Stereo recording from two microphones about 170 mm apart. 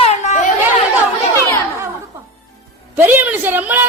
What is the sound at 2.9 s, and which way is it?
Speech, 10° right (ahead or behind).